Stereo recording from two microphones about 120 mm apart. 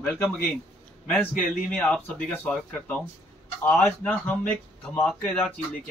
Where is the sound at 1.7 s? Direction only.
10° left (ahead or behind).